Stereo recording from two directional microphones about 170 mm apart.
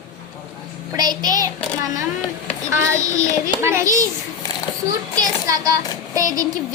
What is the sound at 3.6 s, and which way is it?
Speech, 15° right (ahead or behind).